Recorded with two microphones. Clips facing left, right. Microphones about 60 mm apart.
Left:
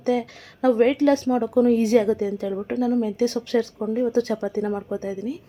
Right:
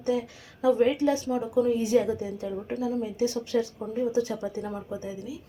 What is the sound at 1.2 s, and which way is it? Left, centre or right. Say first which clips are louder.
A woman's voice: left 6 dB; left.